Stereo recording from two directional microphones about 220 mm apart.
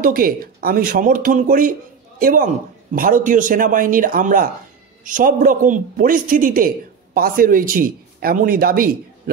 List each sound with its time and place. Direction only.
0.0 s speech: 40° right (ahead or behind)